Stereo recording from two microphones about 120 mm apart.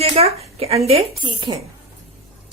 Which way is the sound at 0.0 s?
55° right (ahead or behind).